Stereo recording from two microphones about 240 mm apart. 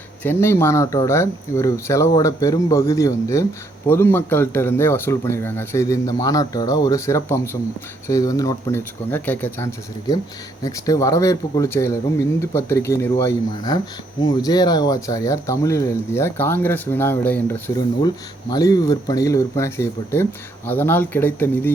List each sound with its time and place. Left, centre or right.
0.2 s speech: centre